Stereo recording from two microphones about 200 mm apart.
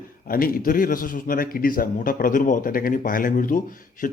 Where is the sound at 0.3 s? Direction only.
45° left (ahead or behind).